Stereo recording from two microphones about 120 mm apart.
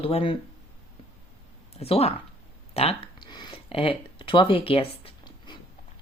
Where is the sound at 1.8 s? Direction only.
60° left (ahead or behind).